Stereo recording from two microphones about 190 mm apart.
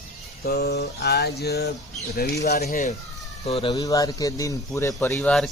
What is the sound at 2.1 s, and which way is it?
Speech, 50° left (ahead or behind).